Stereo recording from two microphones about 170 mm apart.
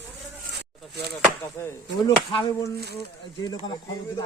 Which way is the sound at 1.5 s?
15° left (ahead or behind).